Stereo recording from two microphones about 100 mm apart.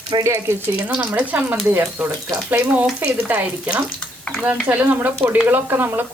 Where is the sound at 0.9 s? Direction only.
15° right (ahead or behind).